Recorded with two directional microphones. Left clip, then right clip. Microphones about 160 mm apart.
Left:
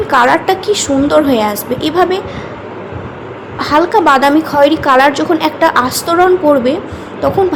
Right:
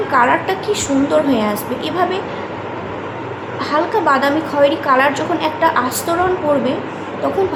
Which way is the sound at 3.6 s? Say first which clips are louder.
Left 7 dB; 45° left (ahead or behind).